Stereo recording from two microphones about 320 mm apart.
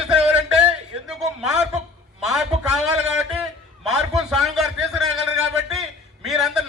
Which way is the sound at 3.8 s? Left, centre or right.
Centre.